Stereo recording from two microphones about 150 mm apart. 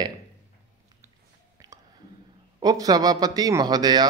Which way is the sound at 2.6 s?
25° right (ahead or behind).